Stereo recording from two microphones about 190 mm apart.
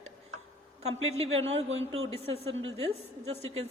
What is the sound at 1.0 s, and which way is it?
Speech, 35° right (ahead or behind).